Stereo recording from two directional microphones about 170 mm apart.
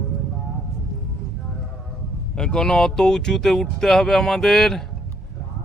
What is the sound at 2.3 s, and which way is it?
Speech, 5° left (ahead or behind).